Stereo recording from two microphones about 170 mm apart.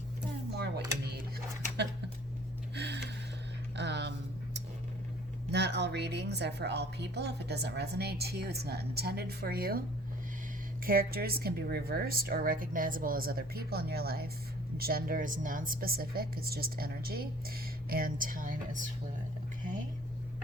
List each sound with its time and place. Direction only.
2.7 s gasp: 90° right
3.8 s a sound: 90° right
5.5 s a woman's voice: 80° right; by 9.8 s 65° right (ahead or behind)
10.8 s speech: 60° right (ahead or behind)